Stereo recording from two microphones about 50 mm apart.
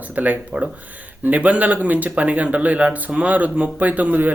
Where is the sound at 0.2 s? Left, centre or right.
Right.